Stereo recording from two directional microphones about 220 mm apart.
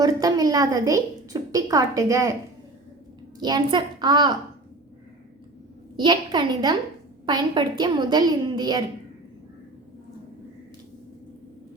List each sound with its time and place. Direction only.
0.0 s a woman's voice: 15° right (ahead or behind)
3.4 s a woman's voice: 20° right (ahead or behind)
6.0 s a woman's voice: 20° right (ahead or behind)